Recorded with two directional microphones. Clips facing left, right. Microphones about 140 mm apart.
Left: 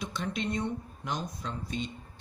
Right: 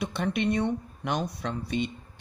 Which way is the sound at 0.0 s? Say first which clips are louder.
Right 6 dB; 60° right (ahead or behind).